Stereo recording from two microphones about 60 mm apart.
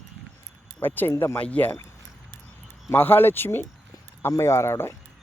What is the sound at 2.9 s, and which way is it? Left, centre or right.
Speech, left.